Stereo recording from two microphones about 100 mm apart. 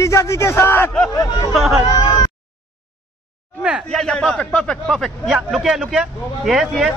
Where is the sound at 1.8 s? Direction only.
35° left (ahead or behind).